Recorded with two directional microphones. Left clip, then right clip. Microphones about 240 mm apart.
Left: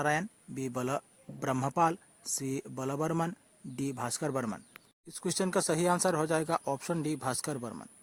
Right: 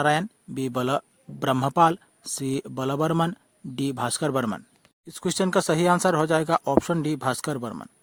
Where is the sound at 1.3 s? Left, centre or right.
Right.